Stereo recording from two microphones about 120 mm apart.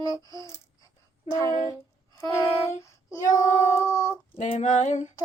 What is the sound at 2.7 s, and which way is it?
Child singing, 25° left (ahead or behind).